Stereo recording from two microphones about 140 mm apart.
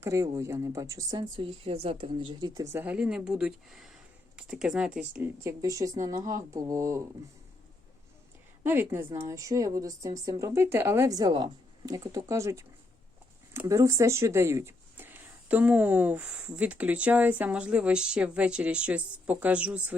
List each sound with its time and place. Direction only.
0.0 s speech: 20° right (ahead or behind)
2.7 s speech: 10° right (ahead or behind)
8.6 s speech: 15° right (ahead or behind)